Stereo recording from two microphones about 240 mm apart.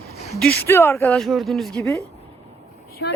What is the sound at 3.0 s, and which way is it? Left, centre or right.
Speech, left.